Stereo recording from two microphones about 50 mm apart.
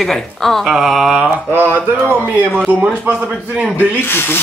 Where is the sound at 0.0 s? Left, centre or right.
Centre.